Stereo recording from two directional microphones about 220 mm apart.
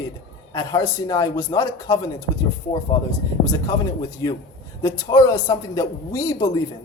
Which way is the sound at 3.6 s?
15° left (ahead or behind).